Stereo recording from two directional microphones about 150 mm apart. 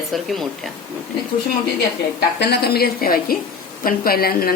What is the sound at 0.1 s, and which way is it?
Speech, centre (ahead or behind).